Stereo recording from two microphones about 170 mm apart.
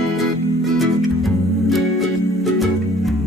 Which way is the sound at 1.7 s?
Centre (ahead or behind).